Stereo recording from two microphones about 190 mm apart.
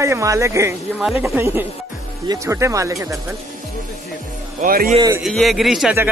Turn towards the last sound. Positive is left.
turn(degrees=-5)  # may be behind; listen again after turning